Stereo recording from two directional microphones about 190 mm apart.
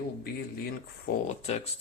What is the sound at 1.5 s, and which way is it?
Speech, 35° left (ahead or behind).